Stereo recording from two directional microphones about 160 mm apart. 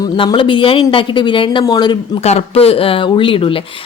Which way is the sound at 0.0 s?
30° left (ahead or behind).